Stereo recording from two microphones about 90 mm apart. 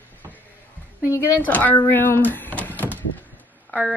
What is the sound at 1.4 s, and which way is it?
Speech, 20° left (ahead or behind).